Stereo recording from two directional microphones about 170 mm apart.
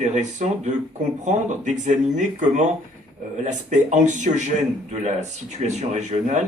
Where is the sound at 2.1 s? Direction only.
45° right (ahead or behind).